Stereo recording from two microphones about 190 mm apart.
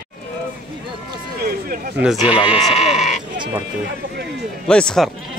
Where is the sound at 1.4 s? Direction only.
50° right (ahead or behind).